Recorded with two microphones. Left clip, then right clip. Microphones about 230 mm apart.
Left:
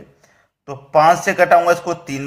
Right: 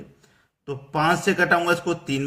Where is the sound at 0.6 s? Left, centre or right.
Centre.